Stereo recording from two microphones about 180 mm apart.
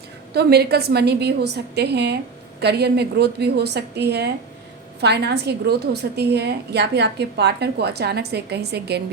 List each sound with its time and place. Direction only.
0.3 s a woman's voice: 65° right (ahead or behind)